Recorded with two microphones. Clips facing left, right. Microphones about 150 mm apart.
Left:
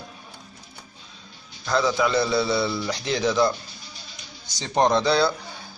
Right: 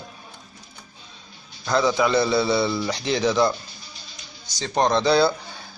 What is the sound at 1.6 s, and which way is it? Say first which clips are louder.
A man's voice: right 2 dB; 5° right (ahead or behind).